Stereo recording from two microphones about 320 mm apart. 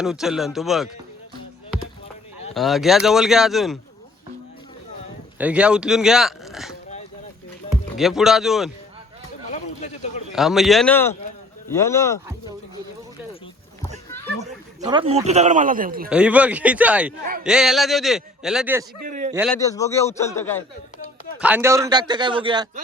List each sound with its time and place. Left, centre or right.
0.0 s a man's voice: centre
2.6 s a man's voice: centre
5.4 s a man's voice: centre
7.9 s a man's voice: centre
9.5 s a sound: left
10.3 s a man's voice: centre
14.8 s a man's voice: centre
16.0 s a man's voice: centre
19.0 s a man's voice: right
19.3 s a man's voice: centre
19.5 s a man's voice: centre
21.3 s a man's voice: centre